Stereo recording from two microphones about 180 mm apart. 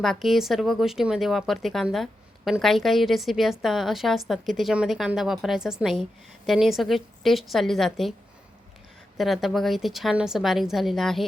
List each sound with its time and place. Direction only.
0.0 s speech: centre (ahead or behind)
9.1 s speech: centre (ahead or behind)